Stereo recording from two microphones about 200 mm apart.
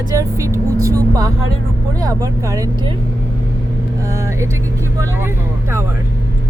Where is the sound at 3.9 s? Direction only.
15° right (ahead or behind).